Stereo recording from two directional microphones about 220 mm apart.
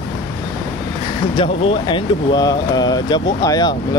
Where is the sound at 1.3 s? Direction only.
25° left (ahead or behind).